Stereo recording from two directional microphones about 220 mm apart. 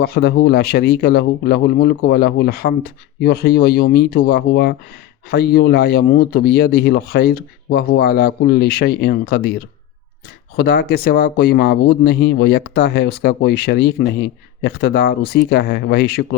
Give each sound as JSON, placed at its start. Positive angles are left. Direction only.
{"t": 0.0, "sound": "speech", "side_deg": 45}
{"t": 10.6, "sound": "speech", "side_deg": 45}